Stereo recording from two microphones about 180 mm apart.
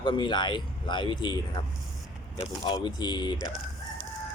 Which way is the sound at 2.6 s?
25° left (ahead or behind).